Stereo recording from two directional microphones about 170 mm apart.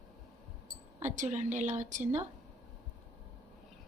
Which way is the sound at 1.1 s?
45° right (ahead or behind).